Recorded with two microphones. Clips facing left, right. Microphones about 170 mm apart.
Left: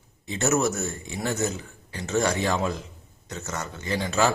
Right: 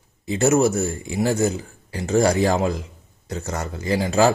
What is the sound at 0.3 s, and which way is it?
Speech, 30° right (ahead or behind).